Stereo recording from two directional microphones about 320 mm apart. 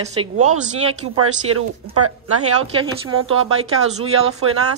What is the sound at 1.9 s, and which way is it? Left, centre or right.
Speech, right.